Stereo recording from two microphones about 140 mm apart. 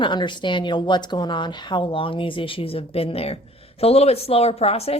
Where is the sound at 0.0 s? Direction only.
35° left (ahead or behind).